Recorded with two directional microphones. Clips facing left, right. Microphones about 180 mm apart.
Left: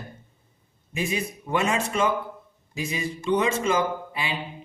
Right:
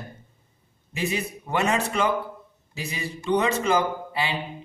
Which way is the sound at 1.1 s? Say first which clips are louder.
Left 2 dB; 35° right (ahead or behind).